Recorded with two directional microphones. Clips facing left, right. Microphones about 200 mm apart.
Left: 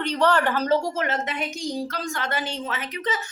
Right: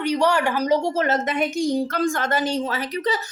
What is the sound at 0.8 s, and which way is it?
Speech, 30° right (ahead or behind).